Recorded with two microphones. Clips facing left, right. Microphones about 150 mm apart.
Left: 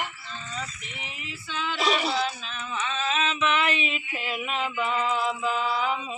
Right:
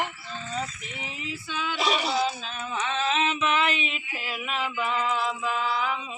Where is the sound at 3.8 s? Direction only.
15° left (ahead or behind).